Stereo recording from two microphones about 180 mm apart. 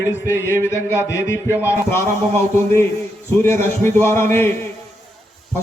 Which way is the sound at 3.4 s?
15° left (ahead or behind).